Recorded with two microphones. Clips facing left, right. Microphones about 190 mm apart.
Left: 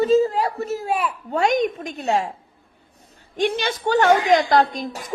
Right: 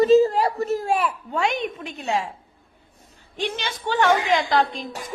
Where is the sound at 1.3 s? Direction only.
40° left (ahead or behind).